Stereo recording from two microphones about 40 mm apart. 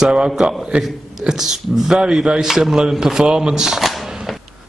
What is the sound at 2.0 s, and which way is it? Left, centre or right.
Speech, right.